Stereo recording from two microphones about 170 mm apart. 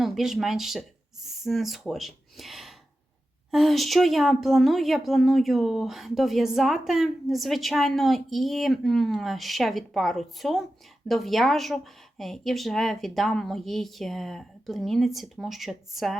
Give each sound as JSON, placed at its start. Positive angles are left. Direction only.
{"t": 0.0, "sound": "a woman's voice", "side_deg": 0}